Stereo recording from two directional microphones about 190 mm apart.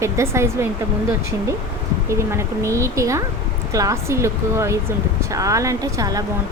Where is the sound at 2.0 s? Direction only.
15° right (ahead or behind).